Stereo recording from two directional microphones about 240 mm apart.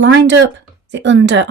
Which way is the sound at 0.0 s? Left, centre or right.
Right.